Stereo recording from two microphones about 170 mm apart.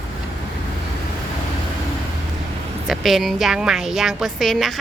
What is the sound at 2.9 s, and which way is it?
A woman's voice, centre (ahead or behind).